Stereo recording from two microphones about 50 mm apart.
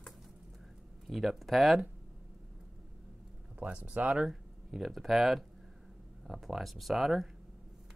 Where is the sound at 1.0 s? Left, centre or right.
Centre.